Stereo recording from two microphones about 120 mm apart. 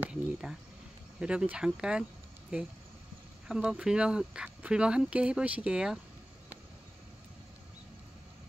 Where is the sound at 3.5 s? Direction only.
5° right (ahead or behind).